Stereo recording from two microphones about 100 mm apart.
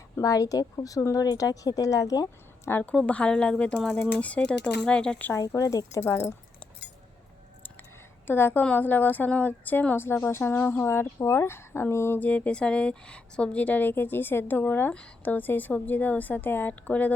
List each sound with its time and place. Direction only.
0.2 s speech: 35° left (ahead or behind)
2.6 s speech: 20° left (ahead or behind)
5.3 s speech: 30° left (ahead or behind)
8.3 s speech: 20° left (ahead or behind)